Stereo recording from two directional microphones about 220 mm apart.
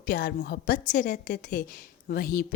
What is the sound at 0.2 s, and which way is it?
A woman's voice, 50° left (ahead or behind).